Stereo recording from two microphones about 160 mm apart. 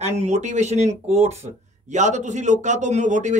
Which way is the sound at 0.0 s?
45° right (ahead or behind).